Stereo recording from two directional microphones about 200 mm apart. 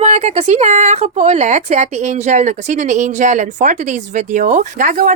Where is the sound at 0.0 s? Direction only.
35° right (ahead or behind).